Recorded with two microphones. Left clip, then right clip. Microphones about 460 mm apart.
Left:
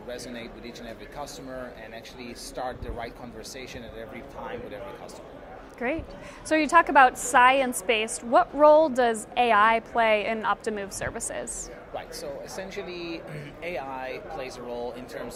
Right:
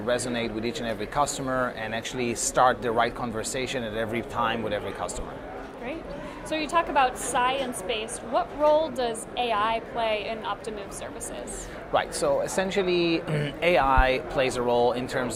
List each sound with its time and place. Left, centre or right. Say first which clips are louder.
0.1 s speech: right 11 dB; right
6.5 s a woman's voice: left 5 dB; left
11.9 s speech: right 12 dB; right